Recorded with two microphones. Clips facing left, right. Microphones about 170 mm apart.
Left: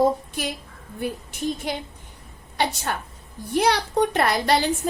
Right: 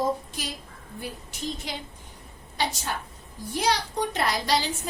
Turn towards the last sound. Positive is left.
turn(degrees=60)  # may be behind; listen again after turning